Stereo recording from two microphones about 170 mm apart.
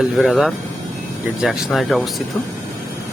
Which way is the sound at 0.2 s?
Centre (ahead or behind).